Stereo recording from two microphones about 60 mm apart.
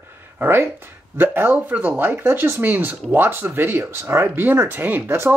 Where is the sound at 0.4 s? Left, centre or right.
Right.